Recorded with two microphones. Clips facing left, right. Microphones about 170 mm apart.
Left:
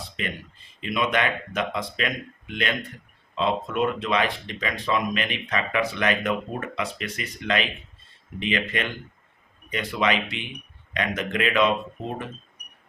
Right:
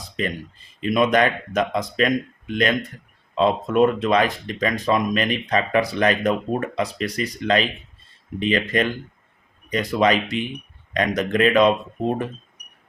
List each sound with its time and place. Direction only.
0.2 s speech: 40° right (ahead or behind)
3.3 s speech: 45° right (ahead or behind)